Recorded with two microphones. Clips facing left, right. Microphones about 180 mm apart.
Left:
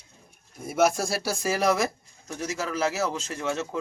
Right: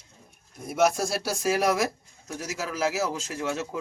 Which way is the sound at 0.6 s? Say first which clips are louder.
Even; centre (ahead or behind).